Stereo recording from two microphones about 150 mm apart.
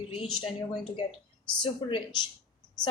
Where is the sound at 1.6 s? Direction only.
30° left (ahead or behind).